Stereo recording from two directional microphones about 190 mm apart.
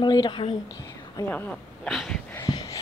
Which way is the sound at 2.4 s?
20° left (ahead or behind).